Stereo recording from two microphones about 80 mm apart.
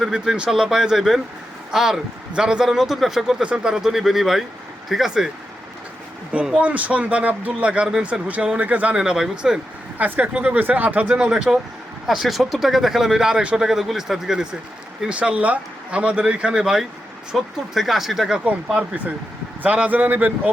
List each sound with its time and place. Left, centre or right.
0.0 s speech: centre
6.3 s speech: centre
12.0 s speech: centre
18.4 s speech: centre